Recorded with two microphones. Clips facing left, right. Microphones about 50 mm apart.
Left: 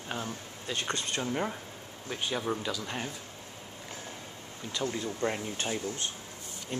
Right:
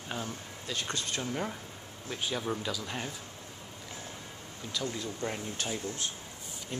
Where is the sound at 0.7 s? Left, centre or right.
Left; by 3.1 s centre.